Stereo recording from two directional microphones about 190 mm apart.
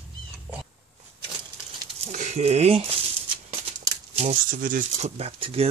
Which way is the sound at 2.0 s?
40° right (ahead or behind).